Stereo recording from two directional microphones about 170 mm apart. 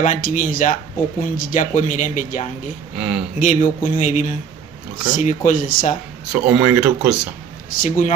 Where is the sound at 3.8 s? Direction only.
45° left (ahead or behind).